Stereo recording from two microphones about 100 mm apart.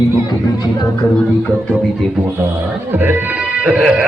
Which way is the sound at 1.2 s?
10° left (ahead or behind).